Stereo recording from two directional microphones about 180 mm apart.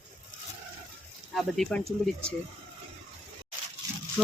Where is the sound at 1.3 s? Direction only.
Centre (ahead or behind).